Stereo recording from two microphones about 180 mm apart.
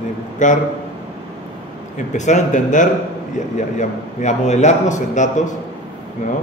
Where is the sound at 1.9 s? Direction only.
40° left (ahead or behind).